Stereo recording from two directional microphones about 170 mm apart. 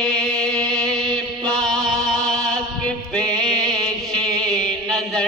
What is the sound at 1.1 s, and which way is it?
Music, 30° right (ahead or behind).